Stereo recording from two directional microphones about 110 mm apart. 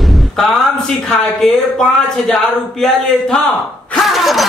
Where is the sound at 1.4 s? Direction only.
5° left (ahead or behind).